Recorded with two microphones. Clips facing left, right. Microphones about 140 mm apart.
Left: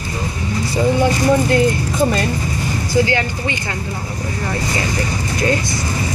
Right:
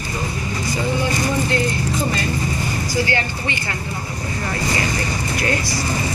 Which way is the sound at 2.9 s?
15° left (ahead or behind).